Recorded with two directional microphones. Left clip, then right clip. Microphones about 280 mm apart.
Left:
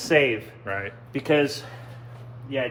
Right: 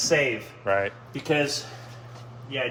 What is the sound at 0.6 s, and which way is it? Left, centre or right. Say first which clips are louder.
Speech: right 6 dB; centre.